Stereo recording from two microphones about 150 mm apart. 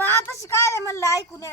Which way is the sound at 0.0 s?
20° left (ahead or behind).